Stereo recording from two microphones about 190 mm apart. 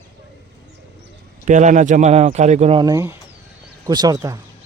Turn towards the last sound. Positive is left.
turn(degrees=-20)  # may be behind; listen again after turning